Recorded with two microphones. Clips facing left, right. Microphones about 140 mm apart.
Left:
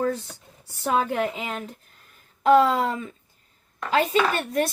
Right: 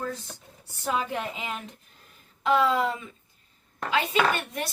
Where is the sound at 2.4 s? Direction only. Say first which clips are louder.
Left 5 dB; 45° left (ahead or behind).